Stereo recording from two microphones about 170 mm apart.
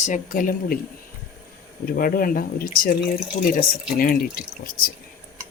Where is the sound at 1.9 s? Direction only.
55° left (ahead or behind).